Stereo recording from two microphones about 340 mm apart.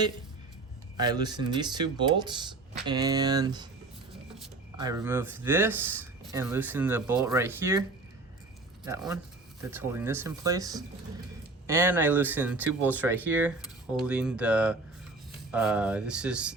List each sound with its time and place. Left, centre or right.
0.9 s speech: centre
4.8 s speech: centre
9.6 s speech: centre